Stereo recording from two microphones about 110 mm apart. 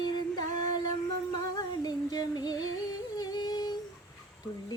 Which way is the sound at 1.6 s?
35° left (ahead or behind).